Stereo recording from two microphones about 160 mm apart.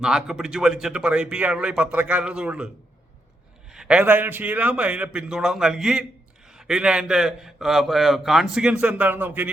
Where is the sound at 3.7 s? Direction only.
5° right (ahead or behind).